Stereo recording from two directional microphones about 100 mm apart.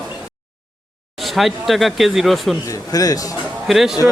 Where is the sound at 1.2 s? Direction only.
Centre (ahead or behind).